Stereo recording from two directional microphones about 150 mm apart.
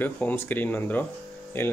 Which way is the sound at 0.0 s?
10° left (ahead or behind).